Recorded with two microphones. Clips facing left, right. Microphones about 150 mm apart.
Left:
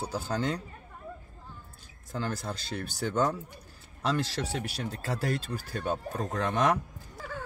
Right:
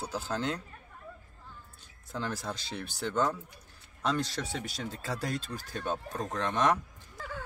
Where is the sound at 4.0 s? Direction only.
5° left (ahead or behind).